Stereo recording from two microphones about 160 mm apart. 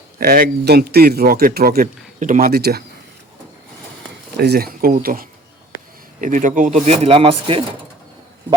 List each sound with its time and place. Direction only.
0.2 s speech: 75° right (ahead or behind)
2.1 s speech: 50° right (ahead or behind); by 2.8 s 85° right
4.4 s a man's voice: 80° right; by 6.7 s 50° right (ahead or behind)
6.8 s speech: 40° right (ahead or behind)